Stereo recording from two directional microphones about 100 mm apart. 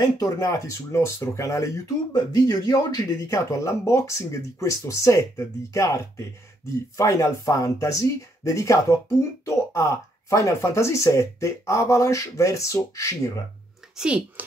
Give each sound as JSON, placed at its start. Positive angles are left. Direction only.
{"t": 0.0, "sound": "speech", "side_deg": 35}
{"t": 13.9, "sound": "speech", "side_deg": -10}